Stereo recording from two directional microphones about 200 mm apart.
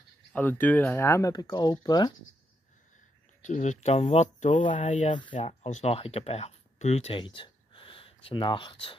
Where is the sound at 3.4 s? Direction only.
35° left (ahead or behind).